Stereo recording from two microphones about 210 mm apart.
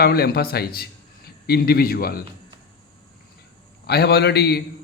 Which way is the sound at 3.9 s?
50° left (ahead or behind).